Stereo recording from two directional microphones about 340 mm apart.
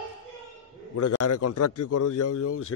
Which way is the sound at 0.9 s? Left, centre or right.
Left.